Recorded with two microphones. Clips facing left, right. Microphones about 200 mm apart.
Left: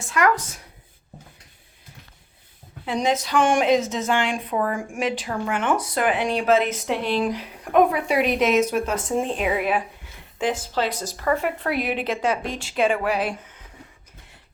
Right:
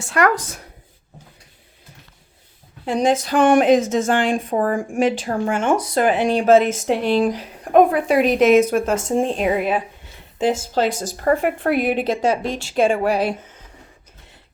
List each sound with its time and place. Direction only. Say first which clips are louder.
0.0 s speech: right 4 dB; 65° right (ahead or behind)
2.8 s a woman's voice: right 5 dB; 50° right (ahead or behind)
9.4 s speech: right 3 dB; 35° right (ahead or behind)
10.8 s a woman's voice: right 5 dB; 50° right (ahead or behind)